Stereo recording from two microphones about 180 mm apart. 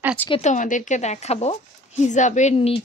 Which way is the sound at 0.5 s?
45° left (ahead or behind).